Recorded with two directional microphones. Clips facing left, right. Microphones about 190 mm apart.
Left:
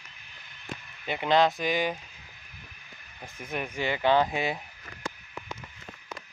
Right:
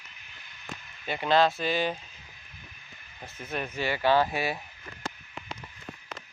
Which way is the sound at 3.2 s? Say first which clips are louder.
Even; 15° left (ahead or behind).